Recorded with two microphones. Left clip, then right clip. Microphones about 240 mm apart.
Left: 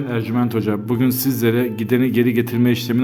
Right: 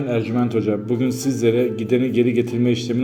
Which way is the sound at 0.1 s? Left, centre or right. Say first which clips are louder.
Right 1 dB; centre.